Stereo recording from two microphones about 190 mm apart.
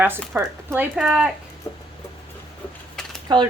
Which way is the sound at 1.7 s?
15° left (ahead or behind).